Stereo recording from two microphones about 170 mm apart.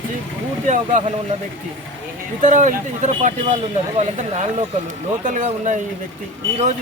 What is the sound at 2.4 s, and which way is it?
A man's voice, 45° right (ahead or behind).